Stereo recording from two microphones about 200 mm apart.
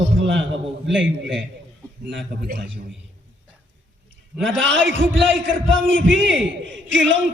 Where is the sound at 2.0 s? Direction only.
65° right (ahead or behind).